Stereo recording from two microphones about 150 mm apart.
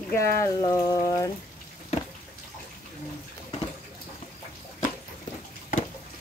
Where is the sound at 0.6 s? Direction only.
25° left (ahead or behind).